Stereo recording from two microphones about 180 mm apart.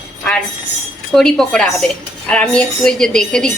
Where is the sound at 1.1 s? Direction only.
Centre (ahead or behind).